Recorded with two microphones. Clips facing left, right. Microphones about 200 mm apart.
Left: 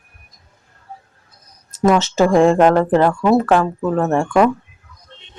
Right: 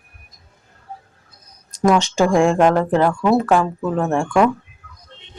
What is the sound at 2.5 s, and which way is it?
Speech, 5° left (ahead or behind).